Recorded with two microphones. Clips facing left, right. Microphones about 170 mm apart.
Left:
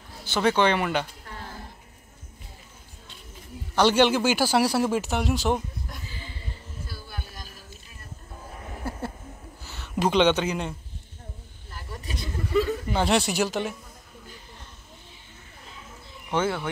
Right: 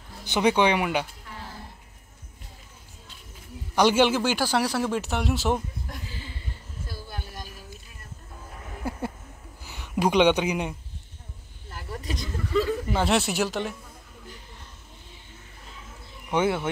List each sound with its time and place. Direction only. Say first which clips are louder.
0.2 s speech: right 1 dB; 15° right (ahead or behind)
3.7 s a man's voice: even; 10° right (ahead or behind)
8.8 s a sound: right 2 dB; 15° right (ahead or behind)
9.7 s speech: right 1 dB; 10° right (ahead or behind)
12.5 s speech: even; centre (ahead or behind)
16.3 s speech: right 2 dB; 15° right (ahead or behind)